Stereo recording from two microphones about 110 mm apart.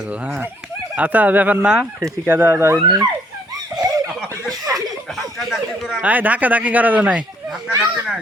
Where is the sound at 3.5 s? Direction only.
30° right (ahead or behind).